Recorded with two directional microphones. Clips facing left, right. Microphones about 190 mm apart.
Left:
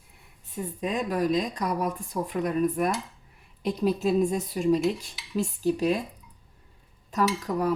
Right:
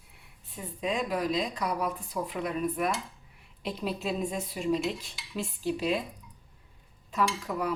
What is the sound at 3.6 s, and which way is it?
Dishes, 45° left (ahead or behind).